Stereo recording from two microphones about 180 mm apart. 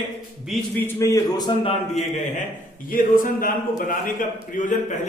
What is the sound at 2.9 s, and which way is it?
Speech, 50° left (ahead or behind).